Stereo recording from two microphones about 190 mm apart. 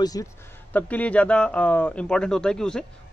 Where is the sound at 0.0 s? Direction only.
20° left (ahead or behind).